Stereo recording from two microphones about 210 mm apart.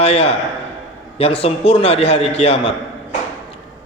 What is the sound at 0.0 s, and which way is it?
A man's voice, 30° left (ahead or behind).